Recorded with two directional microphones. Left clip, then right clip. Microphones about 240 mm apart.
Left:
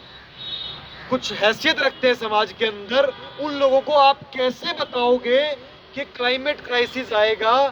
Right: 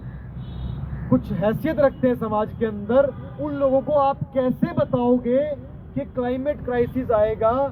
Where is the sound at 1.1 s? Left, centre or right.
Centre.